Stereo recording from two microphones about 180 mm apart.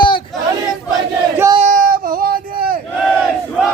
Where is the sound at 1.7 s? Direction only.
50° right (ahead or behind).